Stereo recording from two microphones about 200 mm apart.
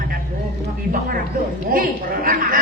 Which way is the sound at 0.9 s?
45° right (ahead or behind).